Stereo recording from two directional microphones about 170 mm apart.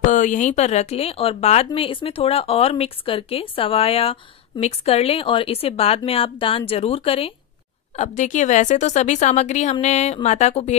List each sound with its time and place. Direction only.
0.0 s a woman's voice: 45° left (ahead or behind)